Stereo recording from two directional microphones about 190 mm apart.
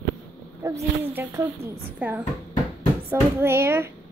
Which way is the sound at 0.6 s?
15° right (ahead or behind).